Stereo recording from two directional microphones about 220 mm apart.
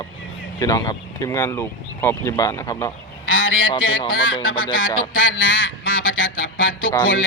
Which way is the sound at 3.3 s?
65° left (ahead or behind).